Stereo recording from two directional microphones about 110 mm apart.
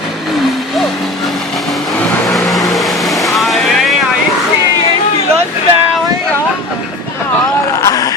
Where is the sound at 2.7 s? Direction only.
Centre (ahead or behind).